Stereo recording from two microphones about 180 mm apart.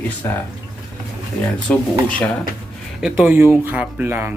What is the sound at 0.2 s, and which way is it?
Speech, 10° left (ahead or behind).